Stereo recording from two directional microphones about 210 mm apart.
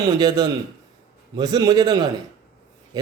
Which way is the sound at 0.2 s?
20° right (ahead or behind).